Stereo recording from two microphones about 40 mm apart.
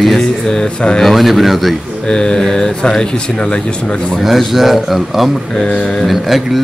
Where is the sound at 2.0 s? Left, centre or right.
Centre.